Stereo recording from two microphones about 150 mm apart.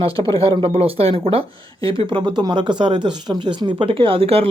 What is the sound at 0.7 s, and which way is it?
Speech, 40° right (ahead or behind).